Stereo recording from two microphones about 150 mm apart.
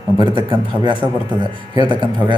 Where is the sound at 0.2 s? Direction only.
30° right (ahead or behind).